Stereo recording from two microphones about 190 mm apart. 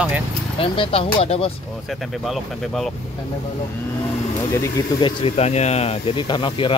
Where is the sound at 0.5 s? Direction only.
30° left (ahead or behind).